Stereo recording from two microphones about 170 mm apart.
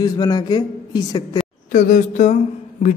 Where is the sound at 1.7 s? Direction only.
50° left (ahead or behind).